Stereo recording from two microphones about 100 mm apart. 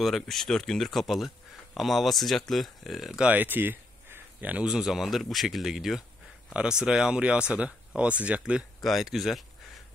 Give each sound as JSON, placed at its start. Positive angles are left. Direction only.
{"t": 0.0, "sound": "speech", "side_deg": 0}
{"t": 3.3, "sound": "speech", "side_deg": -20}
{"t": 8.8, "sound": "speech", "side_deg": 0}